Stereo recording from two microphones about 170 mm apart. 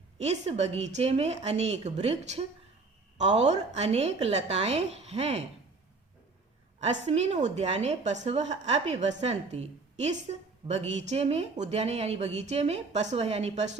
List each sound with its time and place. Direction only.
0.2 s a woman's voice: 40° right (ahead or behind)
6.7 s a woman's voice: 40° right (ahead or behind)